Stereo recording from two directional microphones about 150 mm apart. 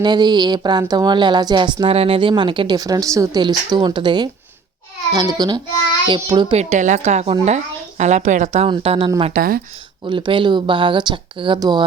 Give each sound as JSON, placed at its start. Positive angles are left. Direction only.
{"t": 0.0, "sound": "a woman's voice", "side_deg": -30}
{"t": 6.5, "sound": "a woman's voice", "side_deg": -50}
{"t": 9.3, "sound": "speech", "side_deg": -75}
{"t": 10.1, "sound": "speech", "side_deg": -30}